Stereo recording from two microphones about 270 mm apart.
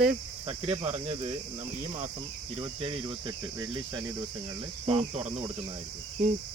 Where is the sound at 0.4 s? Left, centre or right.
Centre.